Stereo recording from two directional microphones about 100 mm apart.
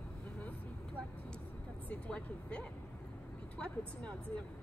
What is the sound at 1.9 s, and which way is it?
Speech, 15° left (ahead or behind).